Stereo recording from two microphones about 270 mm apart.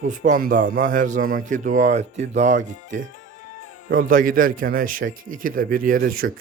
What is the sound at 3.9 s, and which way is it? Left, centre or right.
A man's voice, right.